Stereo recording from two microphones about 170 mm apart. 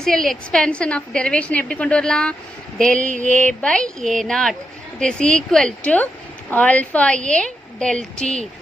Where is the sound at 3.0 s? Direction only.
45° right (ahead or behind).